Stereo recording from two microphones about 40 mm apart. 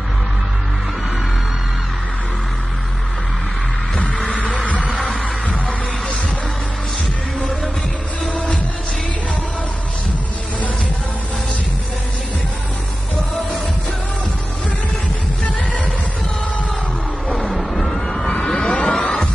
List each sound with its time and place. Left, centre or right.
5.5 s music: left
17.4 s a sound: centre; by 18.9 s left
18.9 s music: centre